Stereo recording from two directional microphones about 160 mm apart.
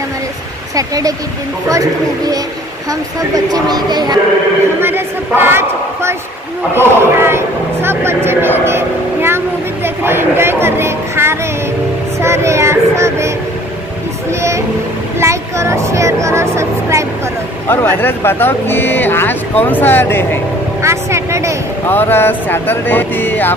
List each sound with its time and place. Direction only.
0.7 s speech: 20° right (ahead or behind)
4.8 s a sound: 15° right (ahead or behind)
6.8 s a woman's voice: 15° right (ahead or behind)
12.2 s child singing: 15° right (ahead or behind)
15.1 s speech: 20° right (ahead or behind)
17.6 s speech: 15° left (ahead or behind)
20.8 s vehicle: 15° right (ahead or behind)
21.8 s speech: 15° left (ahead or behind)